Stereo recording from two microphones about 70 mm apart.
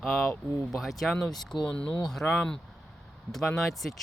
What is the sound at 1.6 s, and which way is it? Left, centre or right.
Speech, centre.